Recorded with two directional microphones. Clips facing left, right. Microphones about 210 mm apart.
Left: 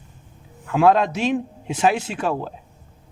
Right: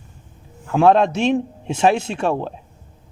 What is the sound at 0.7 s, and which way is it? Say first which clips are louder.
Speech: right 2 dB; 25° right (ahead or behind).